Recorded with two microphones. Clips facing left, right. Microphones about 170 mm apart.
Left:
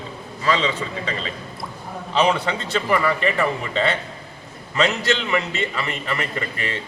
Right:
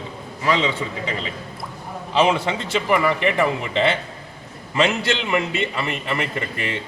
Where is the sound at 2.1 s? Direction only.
10° right (ahead or behind).